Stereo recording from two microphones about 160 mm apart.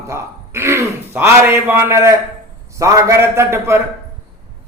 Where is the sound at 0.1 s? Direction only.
15° right (ahead or behind).